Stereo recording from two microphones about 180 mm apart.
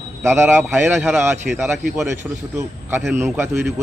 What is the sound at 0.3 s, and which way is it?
A man's voice, 15° right (ahead or behind).